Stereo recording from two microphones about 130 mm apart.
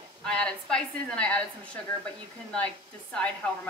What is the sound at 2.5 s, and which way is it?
A woman's voice, 10° left (ahead or behind).